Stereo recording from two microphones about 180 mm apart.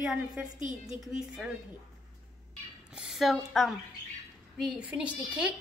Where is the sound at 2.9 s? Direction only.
Centre (ahead or behind).